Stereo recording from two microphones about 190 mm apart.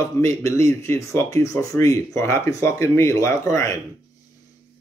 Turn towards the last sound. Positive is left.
turn(degrees=15)  # may be behind; listen again after turning